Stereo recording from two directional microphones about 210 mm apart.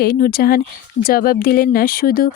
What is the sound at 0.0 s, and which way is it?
Speech, 45° left (ahead or behind).